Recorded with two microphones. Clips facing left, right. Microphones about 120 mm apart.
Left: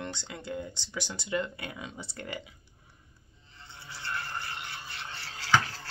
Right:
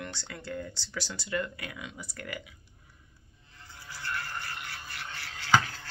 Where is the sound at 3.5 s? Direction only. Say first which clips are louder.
Even; 25° left (ahead or behind).